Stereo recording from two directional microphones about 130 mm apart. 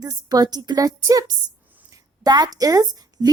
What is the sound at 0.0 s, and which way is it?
A woman's voice, 30° right (ahead or behind).